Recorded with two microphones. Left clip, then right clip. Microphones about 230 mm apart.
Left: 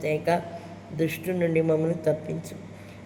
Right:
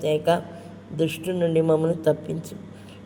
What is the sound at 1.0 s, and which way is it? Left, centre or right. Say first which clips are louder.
A man's voice: right 2 dB; right.